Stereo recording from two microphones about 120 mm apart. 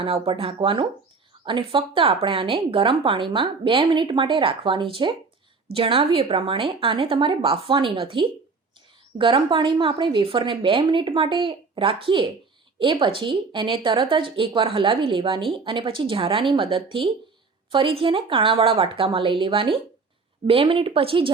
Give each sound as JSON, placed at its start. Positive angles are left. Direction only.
{"t": 0.0, "sound": "a woman's voice", "side_deg": -50}